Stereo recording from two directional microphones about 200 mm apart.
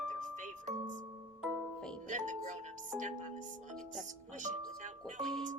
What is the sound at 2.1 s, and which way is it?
Music, 40° right (ahead or behind).